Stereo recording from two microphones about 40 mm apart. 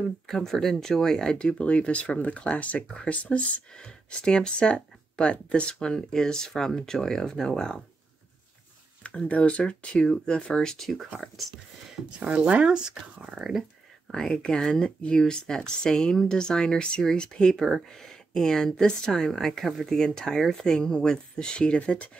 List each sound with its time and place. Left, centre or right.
0.3 s speech: centre; by 3.6 s left
3.7 s speech: centre
9.0 s speech: left
10.0 s speech: centre
11.4 s speech: centre
12.2 s speech: right
13.4 s speech: centre
14.1 s speech: centre